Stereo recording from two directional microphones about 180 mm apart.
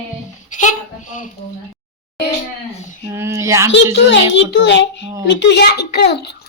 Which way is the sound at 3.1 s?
15° right (ahead or behind).